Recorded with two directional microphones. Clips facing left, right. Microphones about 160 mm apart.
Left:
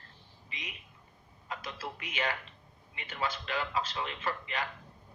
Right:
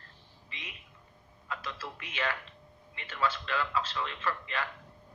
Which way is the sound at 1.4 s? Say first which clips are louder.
Even; 15° left (ahead or behind).